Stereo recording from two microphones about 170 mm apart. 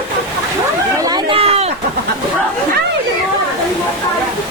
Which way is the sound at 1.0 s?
25° right (ahead or behind).